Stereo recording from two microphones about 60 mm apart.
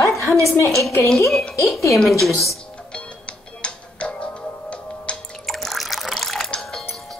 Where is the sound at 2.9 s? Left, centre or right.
Centre.